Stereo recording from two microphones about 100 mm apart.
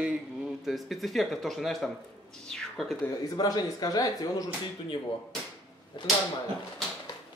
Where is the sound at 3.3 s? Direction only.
40° left (ahead or behind).